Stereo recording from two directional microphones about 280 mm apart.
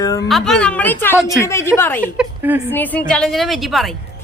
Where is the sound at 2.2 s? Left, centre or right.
Centre.